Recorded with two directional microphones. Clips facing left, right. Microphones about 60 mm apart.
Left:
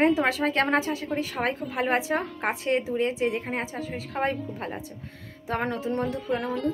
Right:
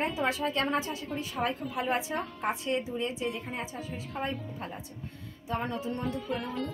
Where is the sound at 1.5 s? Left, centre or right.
Left.